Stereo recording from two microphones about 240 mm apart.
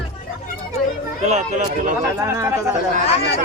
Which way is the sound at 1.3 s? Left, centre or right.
Right.